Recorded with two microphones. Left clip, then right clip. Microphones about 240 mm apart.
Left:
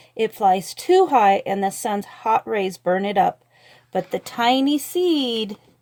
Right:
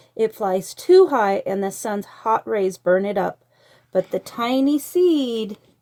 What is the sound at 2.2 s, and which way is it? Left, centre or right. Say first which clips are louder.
Speech: even; left.